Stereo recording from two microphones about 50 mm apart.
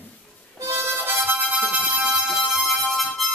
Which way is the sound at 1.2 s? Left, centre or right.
Right.